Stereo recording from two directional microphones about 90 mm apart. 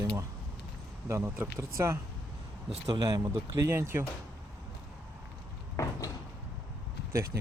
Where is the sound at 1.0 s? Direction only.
30° right (ahead or behind).